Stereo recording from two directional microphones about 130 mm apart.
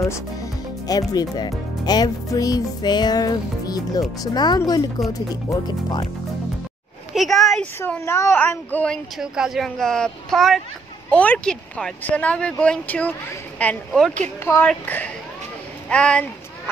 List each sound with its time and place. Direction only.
0.0 s speech: 25° left (ahead or behind)
7.2 s a sound: centre (ahead or behind)
7.8 s speech: 20° left (ahead or behind)
9.2 s speech: 5° right (ahead or behind)